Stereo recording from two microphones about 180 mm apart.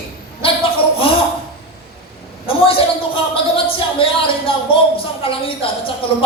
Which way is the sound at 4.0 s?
30° left (ahead or behind).